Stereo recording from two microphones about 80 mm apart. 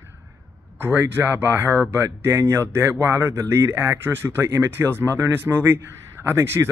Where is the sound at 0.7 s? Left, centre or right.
Right.